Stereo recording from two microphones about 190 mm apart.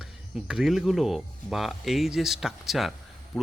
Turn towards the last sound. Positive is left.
turn(degrees=0)  # may be behind; listen again after turning